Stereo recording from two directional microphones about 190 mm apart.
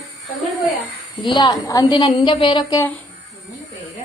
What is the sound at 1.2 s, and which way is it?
A woman's voice, 25° left (ahead or behind).